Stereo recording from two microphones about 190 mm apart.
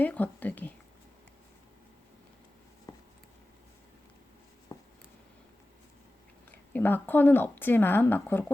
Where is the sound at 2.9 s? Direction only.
20° left (ahead or behind).